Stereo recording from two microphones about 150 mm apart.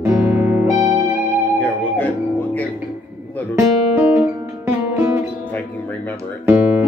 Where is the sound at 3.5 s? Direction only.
15° right (ahead or behind).